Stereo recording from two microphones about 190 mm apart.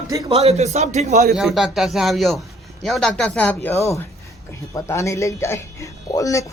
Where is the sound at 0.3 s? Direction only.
35° right (ahead or behind).